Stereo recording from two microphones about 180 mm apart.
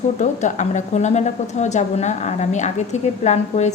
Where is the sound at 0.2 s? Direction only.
40° left (ahead or behind).